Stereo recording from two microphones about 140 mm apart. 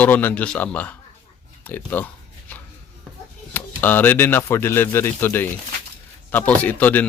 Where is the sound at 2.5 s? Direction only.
15° left (ahead or behind).